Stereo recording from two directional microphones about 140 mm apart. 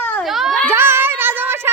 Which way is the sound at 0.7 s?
15° right (ahead or behind).